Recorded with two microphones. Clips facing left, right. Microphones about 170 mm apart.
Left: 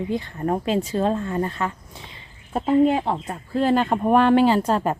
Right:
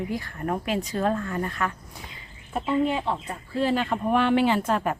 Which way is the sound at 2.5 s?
40° left (ahead or behind).